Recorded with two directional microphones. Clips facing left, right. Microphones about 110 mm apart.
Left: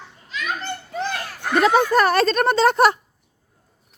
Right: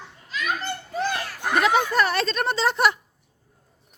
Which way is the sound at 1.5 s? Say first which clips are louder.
Left 4 dB; 40° left (ahead or behind).